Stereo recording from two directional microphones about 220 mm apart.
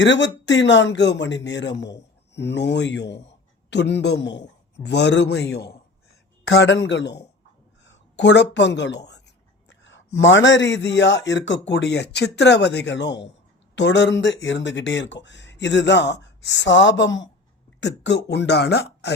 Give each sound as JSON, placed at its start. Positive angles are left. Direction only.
{"t": 0.0, "sound": "a man's voice", "side_deg": 55}
{"t": 9.6, "sound": "a sound", "side_deg": 55}
{"t": 10.2, "sound": "a man's voice", "side_deg": 55}